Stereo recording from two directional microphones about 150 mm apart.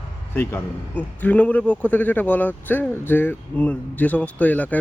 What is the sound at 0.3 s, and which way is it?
A man's voice, 15° left (ahead or behind).